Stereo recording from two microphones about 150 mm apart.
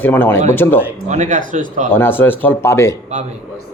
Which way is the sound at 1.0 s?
55° right (ahead or behind).